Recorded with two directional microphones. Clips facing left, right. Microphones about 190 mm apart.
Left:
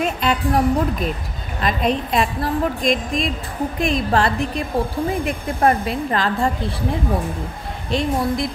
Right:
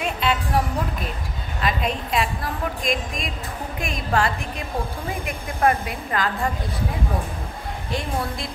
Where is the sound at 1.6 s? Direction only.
35° left (ahead or behind).